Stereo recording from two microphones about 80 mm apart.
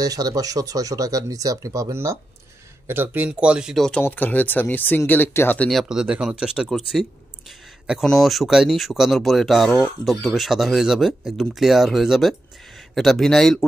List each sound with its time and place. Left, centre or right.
0.0 s speech: right
2.9 s speech: right
4.0 s speech: left
5.7 s speech: centre
6.2 s speech: centre
6.7 s speech: centre